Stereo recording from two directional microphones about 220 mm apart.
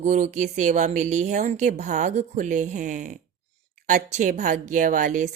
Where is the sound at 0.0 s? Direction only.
35° right (ahead or behind).